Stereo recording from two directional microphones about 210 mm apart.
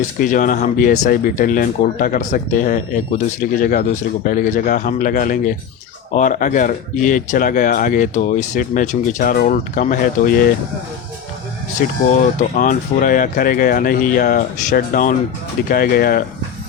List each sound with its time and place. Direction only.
0.2 s speech: 40° left (ahead or behind)
12.4 s speech: 40° left (ahead or behind)